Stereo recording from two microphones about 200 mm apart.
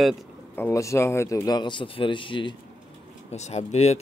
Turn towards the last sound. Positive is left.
turn(degrees=35)  # may be behind; listen again after turning